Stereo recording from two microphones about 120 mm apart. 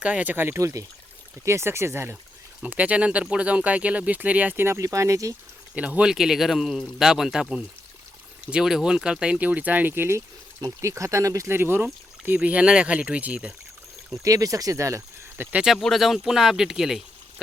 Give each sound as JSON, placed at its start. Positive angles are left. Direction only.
{"t": 0.0, "sound": "speech", "side_deg": -10}
{"t": 5.7, "sound": "a man's voice", "side_deg": -10}
{"t": 14.3, "sound": "speech", "side_deg": -30}
{"t": 15.5, "sound": "a man's voice", "side_deg": -5}